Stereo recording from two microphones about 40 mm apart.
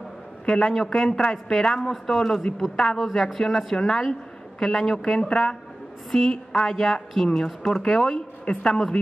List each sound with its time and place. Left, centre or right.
0.5 s a man's voice: centre
1.0 s a man's voice: centre
3.0 s a man's voice: centre
6.6 s a man's voice: centre